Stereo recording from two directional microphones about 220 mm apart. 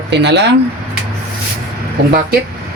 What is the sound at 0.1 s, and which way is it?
Speech, 50° right (ahead or behind).